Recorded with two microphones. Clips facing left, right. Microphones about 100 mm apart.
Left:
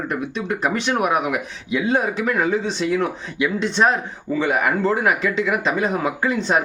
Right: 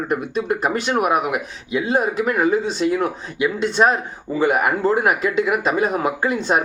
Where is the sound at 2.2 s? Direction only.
5° right (ahead or behind).